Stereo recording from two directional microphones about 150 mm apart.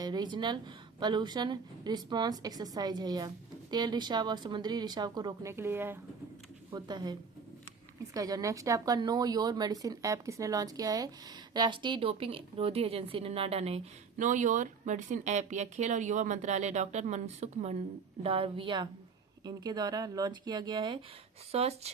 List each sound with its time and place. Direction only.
0.0 s a woman's voice: 30° right (ahead or behind)
6.7 s a woman's voice: 30° right (ahead or behind)
21.5 s speech: 45° right (ahead or behind)